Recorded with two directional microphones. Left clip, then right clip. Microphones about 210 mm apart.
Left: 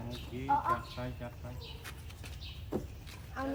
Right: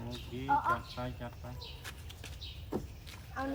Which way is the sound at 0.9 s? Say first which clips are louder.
Right 1 dB; 20° right (ahead or behind).